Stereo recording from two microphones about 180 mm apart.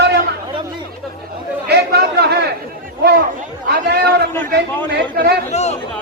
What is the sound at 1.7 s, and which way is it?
Chatter, 65° right (ahead or behind).